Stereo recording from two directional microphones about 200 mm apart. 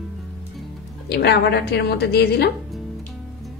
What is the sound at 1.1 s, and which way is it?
A woman's voice, 55° left (ahead or behind).